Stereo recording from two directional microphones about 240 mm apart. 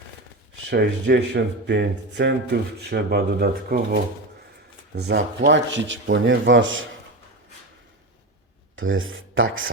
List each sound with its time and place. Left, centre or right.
0.7 s speech: right
4.9 s speech: right
8.7 s speech: right